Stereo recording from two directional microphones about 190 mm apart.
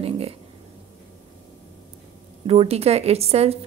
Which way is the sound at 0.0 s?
30° right (ahead or behind).